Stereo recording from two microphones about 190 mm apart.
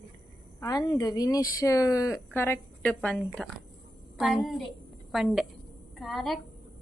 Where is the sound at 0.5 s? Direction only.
15° left (ahead or behind).